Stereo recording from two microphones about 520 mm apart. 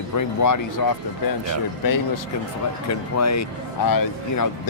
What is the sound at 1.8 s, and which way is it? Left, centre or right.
Speech, left.